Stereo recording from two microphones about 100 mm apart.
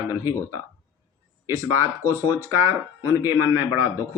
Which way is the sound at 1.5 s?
30° right (ahead or behind).